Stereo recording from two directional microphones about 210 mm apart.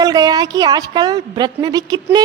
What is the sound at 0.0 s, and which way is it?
A woman's voice, 20° right (ahead or behind).